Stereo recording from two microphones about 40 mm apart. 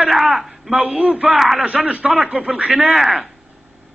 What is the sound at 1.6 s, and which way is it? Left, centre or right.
A man's voice, right.